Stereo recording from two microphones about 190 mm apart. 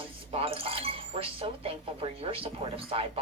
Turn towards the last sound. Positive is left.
turn(degrees=-30)  # may be behind; listen again after turning